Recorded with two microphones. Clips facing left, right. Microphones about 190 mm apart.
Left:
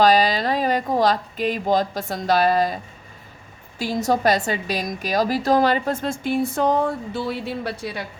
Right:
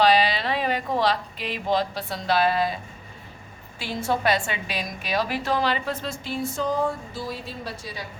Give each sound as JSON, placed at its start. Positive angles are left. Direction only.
{"t": 0.0, "sound": "a woman's voice", "side_deg": 40}
{"t": 3.8, "sound": "a woman's voice", "side_deg": 40}